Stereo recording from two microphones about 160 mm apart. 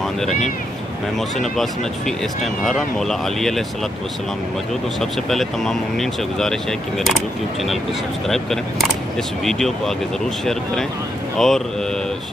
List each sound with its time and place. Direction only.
0.2 s speech: 5° left (ahead or behind)
5.3 s speech: centre (ahead or behind)